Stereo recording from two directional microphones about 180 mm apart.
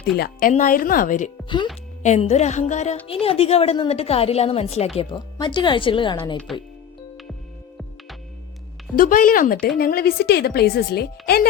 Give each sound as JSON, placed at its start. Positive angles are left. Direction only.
{"t": 0.2, "sound": "a woman's voice", "side_deg": 55}
{"t": 6.5, "sound": "speech", "side_deg": 0}
{"t": 9.0, "sound": "a woman's voice", "side_deg": 50}